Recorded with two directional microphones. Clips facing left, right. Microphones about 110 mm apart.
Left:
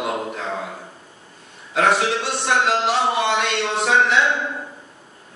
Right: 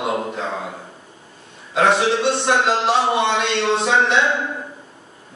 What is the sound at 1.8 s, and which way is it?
Speech, 25° right (ahead or behind).